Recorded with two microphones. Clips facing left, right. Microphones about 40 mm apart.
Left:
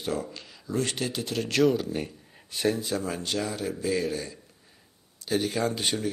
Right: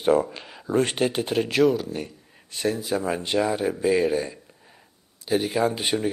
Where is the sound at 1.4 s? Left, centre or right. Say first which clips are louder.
Right 2 dB; centre.